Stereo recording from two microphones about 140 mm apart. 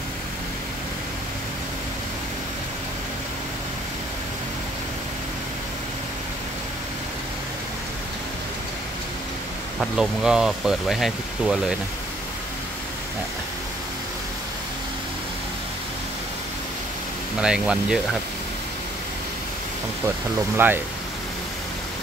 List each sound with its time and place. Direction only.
9.8 s speech: 5° right (ahead or behind)
17.4 s speech: 5° right (ahead or behind)
20.5 s speech: 15° right (ahead or behind)